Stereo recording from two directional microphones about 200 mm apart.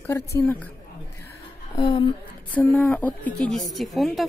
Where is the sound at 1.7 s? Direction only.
25° left (ahead or behind).